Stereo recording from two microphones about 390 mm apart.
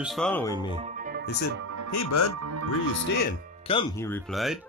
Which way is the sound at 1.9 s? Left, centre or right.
Left.